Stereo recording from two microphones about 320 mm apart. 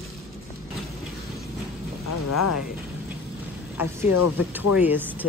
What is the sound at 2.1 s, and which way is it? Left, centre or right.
Speech, left.